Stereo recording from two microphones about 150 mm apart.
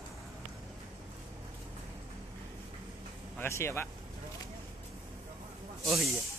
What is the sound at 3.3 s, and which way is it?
Speech, 15° left (ahead or behind).